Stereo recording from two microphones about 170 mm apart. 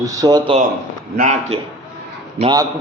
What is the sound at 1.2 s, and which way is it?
Speech, 40° right (ahead or behind).